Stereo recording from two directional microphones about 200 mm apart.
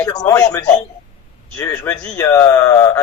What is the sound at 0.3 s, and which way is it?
Speech, 15° left (ahead or behind).